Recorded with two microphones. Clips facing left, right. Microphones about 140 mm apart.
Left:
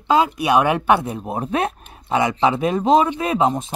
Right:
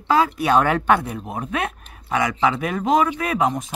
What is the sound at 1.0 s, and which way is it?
Speech, 25° left (ahead or behind).